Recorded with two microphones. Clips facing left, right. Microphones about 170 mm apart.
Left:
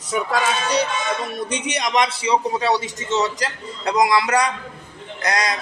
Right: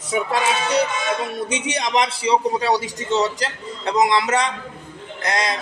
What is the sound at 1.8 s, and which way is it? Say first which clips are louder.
Speech: left 1 dB; 30° right (ahead or behind).